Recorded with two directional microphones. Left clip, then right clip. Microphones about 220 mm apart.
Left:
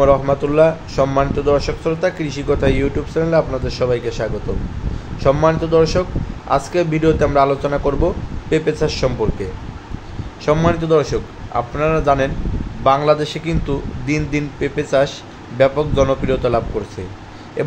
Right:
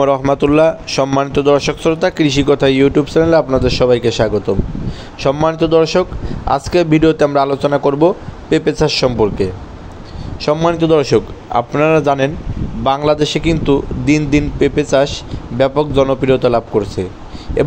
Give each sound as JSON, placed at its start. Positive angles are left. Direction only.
{"t": 0.0, "sound": "a man's voice", "side_deg": -40}